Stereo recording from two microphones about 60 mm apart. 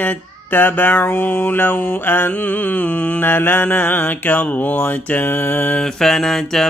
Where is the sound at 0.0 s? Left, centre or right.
Left.